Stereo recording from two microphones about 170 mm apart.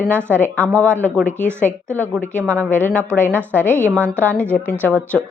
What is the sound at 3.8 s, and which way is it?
Speech, 15° right (ahead or behind).